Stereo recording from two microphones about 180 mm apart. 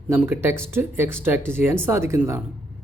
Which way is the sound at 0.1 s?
10° right (ahead or behind).